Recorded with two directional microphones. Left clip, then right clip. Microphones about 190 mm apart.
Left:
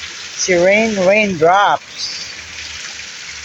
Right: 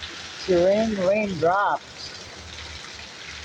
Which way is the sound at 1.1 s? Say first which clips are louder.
Left 10 dB; 30° left (ahead or behind).